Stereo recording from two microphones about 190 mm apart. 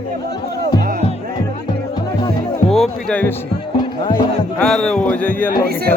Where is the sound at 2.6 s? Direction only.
Centre (ahead or behind).